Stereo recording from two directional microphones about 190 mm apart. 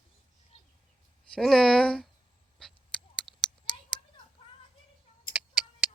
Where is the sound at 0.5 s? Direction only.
35° left (ahead or behind).